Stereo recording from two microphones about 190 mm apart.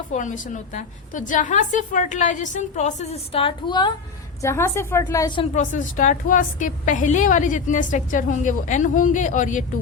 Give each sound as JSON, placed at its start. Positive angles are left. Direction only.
{"t": 0.1, "sound": "a woman's voice", "side_deg": 40}
{"t": 5.5, "sound": "a woman's voice", "side_deg": 45}